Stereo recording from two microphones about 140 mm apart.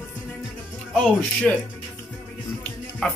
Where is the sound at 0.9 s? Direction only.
10° left (ahead or behind).